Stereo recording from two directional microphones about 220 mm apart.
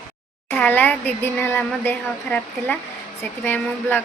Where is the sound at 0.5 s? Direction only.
10° left (ahead or behind).